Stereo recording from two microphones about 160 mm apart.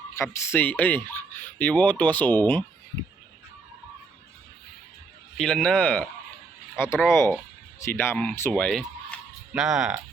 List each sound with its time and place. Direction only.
0.2 s speech: 10° left (ahead or behind)
5.4 s speech: 5° left (ahead or behind)